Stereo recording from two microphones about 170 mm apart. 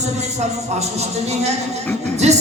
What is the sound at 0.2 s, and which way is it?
A man's voice, 40° right (ahead or behind).